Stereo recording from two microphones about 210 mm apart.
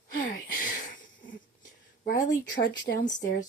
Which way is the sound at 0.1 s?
40° left (ahead or behind).